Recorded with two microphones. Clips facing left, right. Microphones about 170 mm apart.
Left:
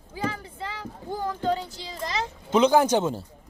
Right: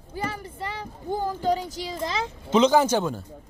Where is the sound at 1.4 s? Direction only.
15° right (ahead or behind).